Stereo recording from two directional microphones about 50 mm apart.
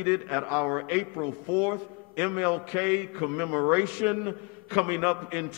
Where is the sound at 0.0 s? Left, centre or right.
Right.